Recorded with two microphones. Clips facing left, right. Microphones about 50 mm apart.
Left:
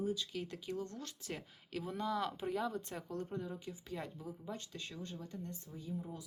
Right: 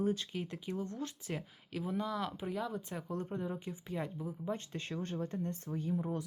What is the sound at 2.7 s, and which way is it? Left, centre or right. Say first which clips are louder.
Speech: right 2 dB; centre.